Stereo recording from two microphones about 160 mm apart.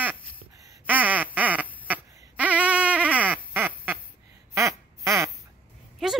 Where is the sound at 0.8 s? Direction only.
10° right (ahead or behind).